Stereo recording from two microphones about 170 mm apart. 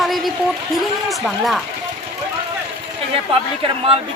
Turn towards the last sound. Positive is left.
turn(degrees=-35)  # may be behind; listen again after turning